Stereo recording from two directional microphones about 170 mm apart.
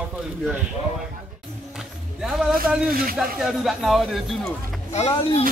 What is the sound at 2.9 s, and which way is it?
Speech, 55° right (ahead or behind).